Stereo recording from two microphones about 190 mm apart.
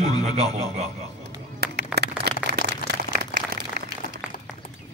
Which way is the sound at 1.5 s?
60° right (ahead or behind).